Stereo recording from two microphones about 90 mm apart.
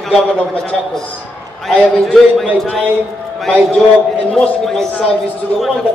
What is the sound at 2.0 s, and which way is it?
Speech, 5° right (ahead or behind).